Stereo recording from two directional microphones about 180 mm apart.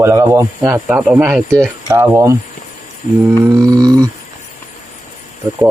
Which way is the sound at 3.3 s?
15° right (ahead or behind).